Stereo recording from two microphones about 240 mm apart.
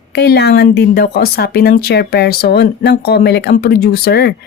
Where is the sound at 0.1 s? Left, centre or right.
Left.